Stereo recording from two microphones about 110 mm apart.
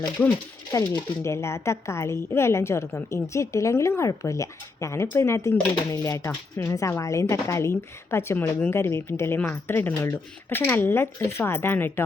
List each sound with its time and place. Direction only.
0.7 s speech: 30° left (ahead or behind)